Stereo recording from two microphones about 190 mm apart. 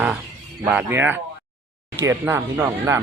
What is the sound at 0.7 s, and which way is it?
Speech, 10° right (ahead or behind).